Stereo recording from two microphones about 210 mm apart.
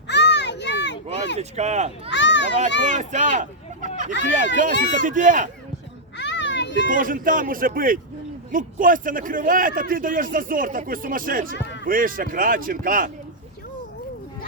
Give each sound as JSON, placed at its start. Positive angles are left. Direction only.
{"t": 0.1, "sound": "a sound", "side_deg": 55}
{"t": 1.4, "sound": "speech", "side_deg": -30}
{"t": 2.0, "sound": "a child's voice", "side_deg": 55}
{"t": 3.3, "sound": "hubbub", "side_deg": -35}
{"t": 4.5, "sound": "speech", "side_deg": -40}
{"t": 6.1, "sound": "children playing", "side_deg": 55}
{"t": 6.9, "sound": "speech", "side_deg": -40}
{"t": 11.5, "sound": "speech", "side_deg": 55}
{"t": 11.9, "sound": "speech", "side_deg": -40}